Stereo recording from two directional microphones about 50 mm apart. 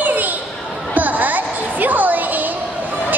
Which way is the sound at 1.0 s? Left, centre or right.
Right.